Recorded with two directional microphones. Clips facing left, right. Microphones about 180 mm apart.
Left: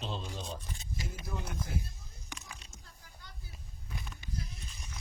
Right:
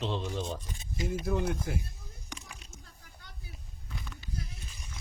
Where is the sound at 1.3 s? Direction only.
70° right (ahead or behind).